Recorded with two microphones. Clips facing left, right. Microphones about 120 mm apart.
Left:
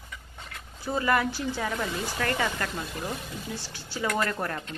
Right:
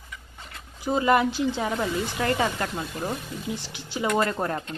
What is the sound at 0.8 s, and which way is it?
A woman's voice, 20° right (ahead or behind).